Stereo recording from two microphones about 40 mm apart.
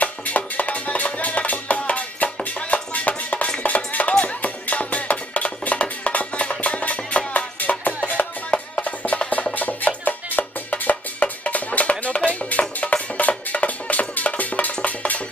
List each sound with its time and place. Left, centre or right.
0.0 s music: left